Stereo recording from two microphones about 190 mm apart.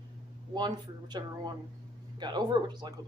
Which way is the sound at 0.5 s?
20° right (ahead or behind).